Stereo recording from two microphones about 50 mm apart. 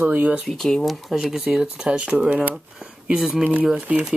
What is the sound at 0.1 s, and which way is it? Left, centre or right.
Speech, right.